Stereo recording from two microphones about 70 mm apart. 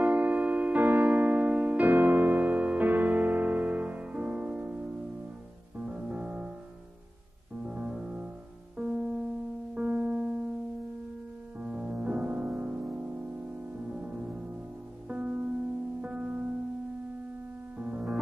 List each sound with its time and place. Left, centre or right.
0.0 s music: right
7.6 s music: centre
11.6 s music: centre
17.7 s music: centre